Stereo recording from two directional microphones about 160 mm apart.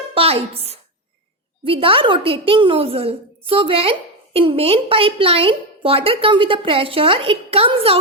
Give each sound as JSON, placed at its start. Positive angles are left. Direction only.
{"t": 0.1, "sound": "a woman's voice", "side_deg": -35}